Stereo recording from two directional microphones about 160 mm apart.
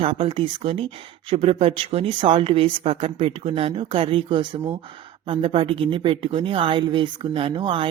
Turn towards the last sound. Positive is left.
turn(degrees=-35)  # may be behind; listen again after turning